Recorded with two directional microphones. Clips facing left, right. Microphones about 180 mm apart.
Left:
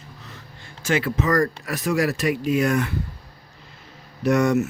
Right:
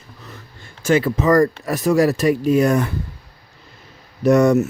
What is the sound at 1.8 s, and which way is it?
Speech, 40° right (ahead or behind).